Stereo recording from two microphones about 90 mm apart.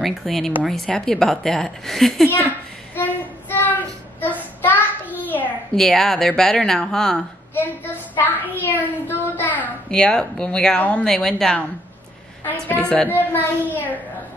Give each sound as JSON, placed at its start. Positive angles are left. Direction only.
{"t": 0.0, "sound": "a woman's voice", "side_deg": 0}
{"t": 2.2, "sound": "a woman's voice", "side_deg": 25}
{"t": 3.0, "sound": "child singing", "side_deg": 20}
{"t": 5.8, "sound": "a woman's voice", "side_deg": 5}
{"t": 7.5, "sound": "a sound", "side_deg": 20}
{"t": 9.8, "sound": "speech", "side_deg": 10}
{"t": 11.1, "sound": "a woman's voice", "side_deg": 5}
{"t": 12.6, "sound": "a woman's voice", "side_deg": 15}